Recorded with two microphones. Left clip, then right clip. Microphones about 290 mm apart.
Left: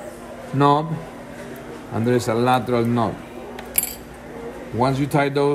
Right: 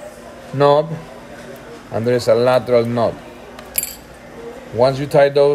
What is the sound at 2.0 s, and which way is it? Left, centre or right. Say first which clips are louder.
A man's voice: right 6 dB; right.